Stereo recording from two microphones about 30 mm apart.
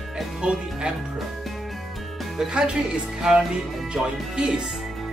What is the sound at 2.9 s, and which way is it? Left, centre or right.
Speech, right.